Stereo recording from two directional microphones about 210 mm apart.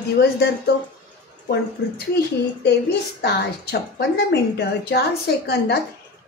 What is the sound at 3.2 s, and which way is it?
A woman's voice, 50° left (ahead or behind).